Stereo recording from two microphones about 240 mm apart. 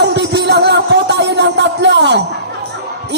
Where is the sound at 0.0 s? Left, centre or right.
Right.